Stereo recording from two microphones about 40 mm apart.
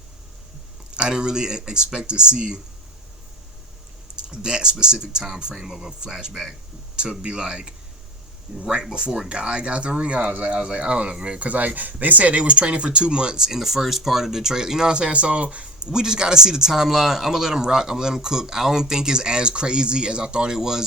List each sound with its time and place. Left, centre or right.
0.9 s speech: right
4.1 s speech: right
11.3 s speech: right
15.1 s speech: right; by 20.8 s centre